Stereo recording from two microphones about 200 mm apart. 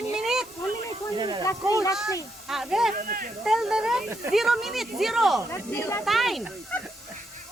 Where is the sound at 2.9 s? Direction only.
45° right (ahead or behind).